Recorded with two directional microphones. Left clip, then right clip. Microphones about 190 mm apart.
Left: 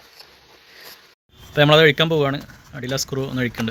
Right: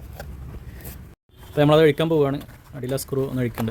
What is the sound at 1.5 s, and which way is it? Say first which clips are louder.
A man's voice: left 3 dB; 10° right (ahead or behind).